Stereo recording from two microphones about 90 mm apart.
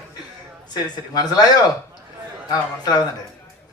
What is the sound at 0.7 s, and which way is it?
A man's voice, 50° left (ahead or behind).